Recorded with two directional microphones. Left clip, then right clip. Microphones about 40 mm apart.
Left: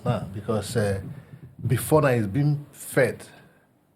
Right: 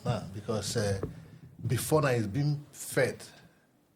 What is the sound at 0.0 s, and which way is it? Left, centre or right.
A man's voice, left.